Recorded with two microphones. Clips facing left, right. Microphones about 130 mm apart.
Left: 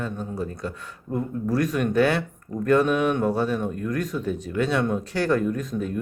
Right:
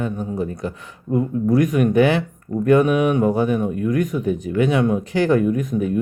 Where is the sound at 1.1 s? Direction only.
5° right (ahead or behind).